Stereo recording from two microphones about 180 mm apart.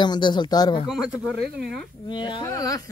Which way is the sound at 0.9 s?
5° right (ahead or behind).